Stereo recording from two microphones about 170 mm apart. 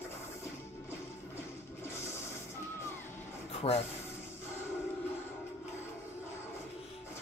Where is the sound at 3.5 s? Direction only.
35° left (ahead or behind).